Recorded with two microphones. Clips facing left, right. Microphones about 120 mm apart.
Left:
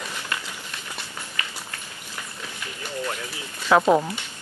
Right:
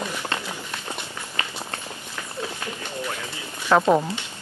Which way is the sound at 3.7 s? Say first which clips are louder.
Even; centre (ahead or behind).